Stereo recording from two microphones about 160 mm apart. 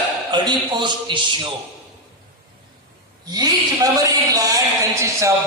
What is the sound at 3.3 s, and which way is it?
A man's voice, 25° right (ahead or behind).